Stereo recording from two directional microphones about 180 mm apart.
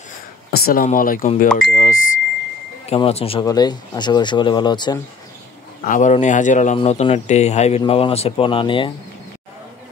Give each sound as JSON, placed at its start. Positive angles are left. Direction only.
{"t": 0.5, "sound": "speech", "side_deg": 55}
{"t": 2.9, "sound": "speech", "side_deg": 35}
{"t": 3.4, "sound": "speech", "side_deg": 20}
{"t": 5.9, "sound": "speech", "side_deg": 45}